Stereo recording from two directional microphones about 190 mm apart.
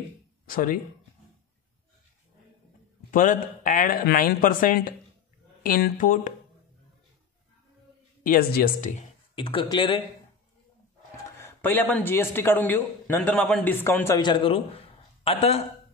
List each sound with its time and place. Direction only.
0.5 s speech: 50° left (ahead or behind)
3.1 s speech: 45° left (ahead or behind)
8.2 s speech: 50° left (ahead or behind)
9.3 s speech: 25° left (ahead or behind)
11.4 s a man's voice: 10° left (ahead or behind); by 15.6 s 30° left (ahead or behind)